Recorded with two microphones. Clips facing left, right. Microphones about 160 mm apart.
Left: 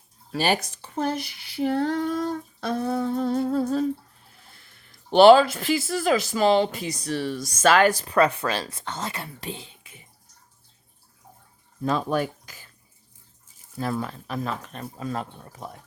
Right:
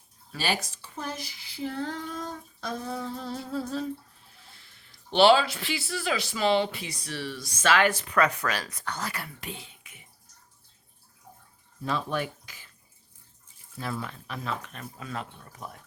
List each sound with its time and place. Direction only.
0.3 s speech: 55° left (ahead or behind)
5.1 s speech: 50° left (ahead or behind); by 10.0 s 30° left (ahead or behind)
11.8 s speech: 45° left (ahead or behind)
13.7 s speech: 40° left (ahead or behind)